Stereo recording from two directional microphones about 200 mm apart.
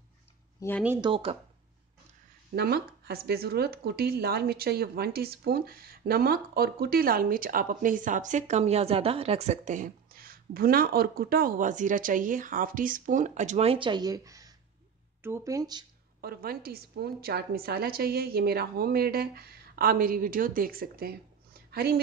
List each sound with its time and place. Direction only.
0.6 s speech: 10° left (ahead or behind)
1.0 s speech: 25° right (ahead or behind)
2.5 s speech: 50° right (ahead or behind); by 15.8 s 20° right (ahead or behind)
16.2 s speech: 50° right (ahead or behind)